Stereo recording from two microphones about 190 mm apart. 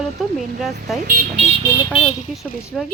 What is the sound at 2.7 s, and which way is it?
Speech, 5° left (ahead or behind).